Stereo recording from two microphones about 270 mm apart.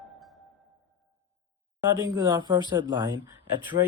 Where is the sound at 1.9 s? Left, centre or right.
Centre.